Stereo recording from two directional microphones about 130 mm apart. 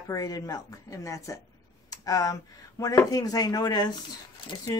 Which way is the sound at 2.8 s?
25° left (ahead or behind).